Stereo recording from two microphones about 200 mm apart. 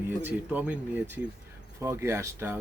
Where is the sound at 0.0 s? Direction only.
10° right (ahead or behind).